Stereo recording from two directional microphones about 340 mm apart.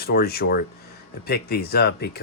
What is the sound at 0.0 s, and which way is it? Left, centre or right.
Speech, left.